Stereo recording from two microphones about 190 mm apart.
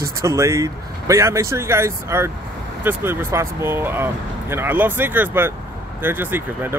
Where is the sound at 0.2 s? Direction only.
15° right (ahead or behind).